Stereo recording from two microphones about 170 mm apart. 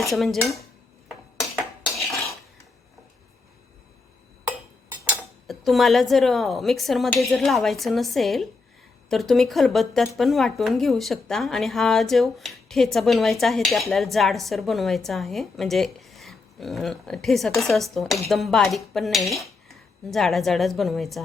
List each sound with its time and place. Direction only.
0.0 s speech: centre (ahead or behind)
1.0 s cutlery: centre (ahead or behind)
5.5 s speech: centre (ahead or behind)